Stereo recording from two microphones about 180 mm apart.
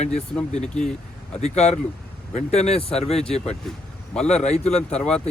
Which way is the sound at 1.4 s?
40° left (ahead or behind).